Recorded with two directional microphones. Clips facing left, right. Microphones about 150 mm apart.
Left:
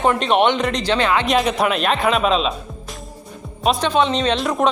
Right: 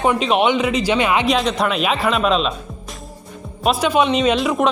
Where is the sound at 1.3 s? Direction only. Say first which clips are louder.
Left 1 dB; centre (ahead or behind).